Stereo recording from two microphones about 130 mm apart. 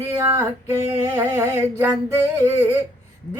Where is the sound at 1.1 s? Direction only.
15° right (ahead or behind).